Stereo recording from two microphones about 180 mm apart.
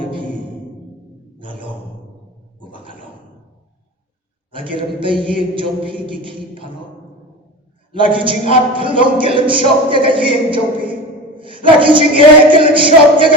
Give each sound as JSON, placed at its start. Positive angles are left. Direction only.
{"t": 1.4, "sound": "sigh", "side_deg": -30}
{"t": 2.6, "sound": "a sound", "side_deg": -25}
{"t": 4.5, "sound": "speech", "side_deg": -30}
{"t": 7.9, "sound": "a man's voice", "side_deg": -30}